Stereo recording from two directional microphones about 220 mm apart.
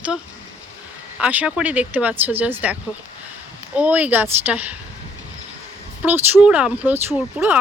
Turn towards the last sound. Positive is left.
turn(degrees=-10)  # may be behind; listen again after turning